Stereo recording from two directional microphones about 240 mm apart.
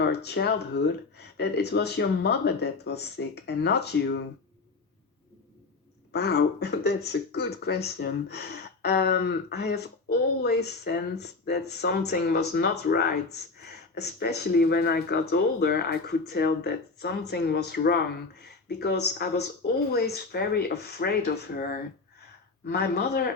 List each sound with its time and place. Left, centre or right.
0.0 s speech: left
6.1 s speech: left